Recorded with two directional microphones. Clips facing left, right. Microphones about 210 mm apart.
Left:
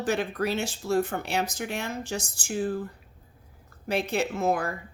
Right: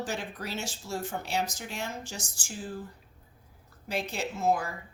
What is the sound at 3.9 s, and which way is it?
Speech, 60° left (ahead or behind).